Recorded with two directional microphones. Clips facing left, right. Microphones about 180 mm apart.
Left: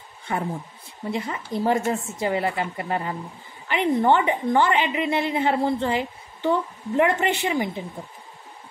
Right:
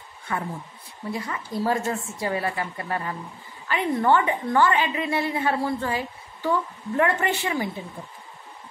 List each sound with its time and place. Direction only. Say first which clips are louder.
0.3 s a woman's voice: left 3 dB; 20° left (ahead or behind)